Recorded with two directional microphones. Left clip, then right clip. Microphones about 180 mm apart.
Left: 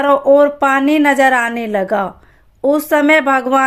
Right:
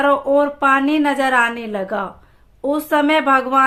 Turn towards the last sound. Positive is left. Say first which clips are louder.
# left 2 dB
turn(degrees=35)  # may be behind; listen again after turning